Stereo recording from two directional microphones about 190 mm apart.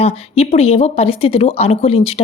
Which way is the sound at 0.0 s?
35° left (ahead or behind).